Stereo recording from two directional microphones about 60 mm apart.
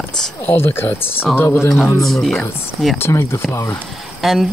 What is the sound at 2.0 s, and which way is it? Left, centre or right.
Speech, centre.